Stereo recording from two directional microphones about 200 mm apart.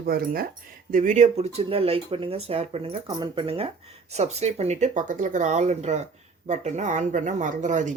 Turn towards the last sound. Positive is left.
turn(degrees=-40)  # may be behind; listen again after turning